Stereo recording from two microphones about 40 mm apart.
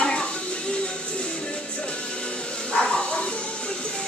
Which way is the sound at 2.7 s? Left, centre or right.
Left.